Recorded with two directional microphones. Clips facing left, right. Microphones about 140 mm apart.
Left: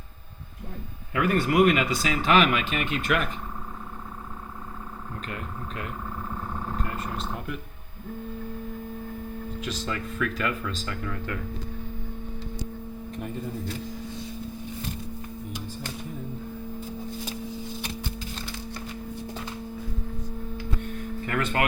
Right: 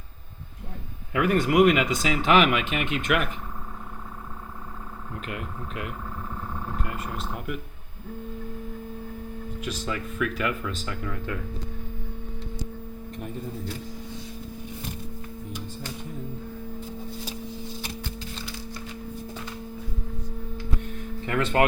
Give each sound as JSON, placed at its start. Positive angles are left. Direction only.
{"t": 1.1, "sound": "speech", "side_deg": -15}
{"t": 5.2, "sound": "speech", "side_deg": -10}
{"t": 9.6, "sound": "speech", "side_deg": -10}
{"t": 21.2, "sound": "speech", "side_deg": -25}